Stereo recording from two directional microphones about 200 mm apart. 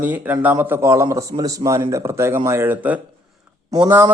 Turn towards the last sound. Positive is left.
turn(degrees=-10)  # may be behind; listen again after turning